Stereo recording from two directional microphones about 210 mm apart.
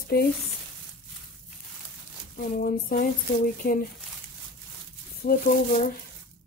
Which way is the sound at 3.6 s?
45° left (ahead or behind).